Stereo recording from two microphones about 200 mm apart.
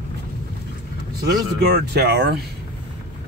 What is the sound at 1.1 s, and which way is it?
Speech, 50° right (ahead or behind).